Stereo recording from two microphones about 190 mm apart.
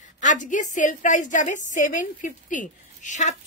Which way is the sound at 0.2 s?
40° left (ahead or behind).